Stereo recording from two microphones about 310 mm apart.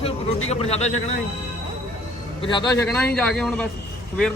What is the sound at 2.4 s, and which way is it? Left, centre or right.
A man's voice, centre.